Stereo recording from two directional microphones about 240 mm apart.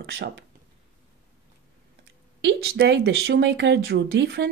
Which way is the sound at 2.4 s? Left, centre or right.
Right.